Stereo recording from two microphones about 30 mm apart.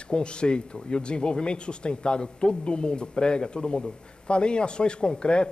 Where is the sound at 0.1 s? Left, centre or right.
Left.